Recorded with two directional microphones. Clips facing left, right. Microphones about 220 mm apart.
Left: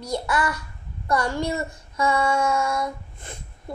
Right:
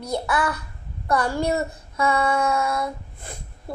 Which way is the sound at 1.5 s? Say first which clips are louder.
Right 4 dB; 60° right (ahead or behind).